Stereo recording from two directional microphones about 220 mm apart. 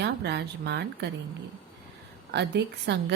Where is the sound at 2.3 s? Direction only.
50° right (ahead or behind).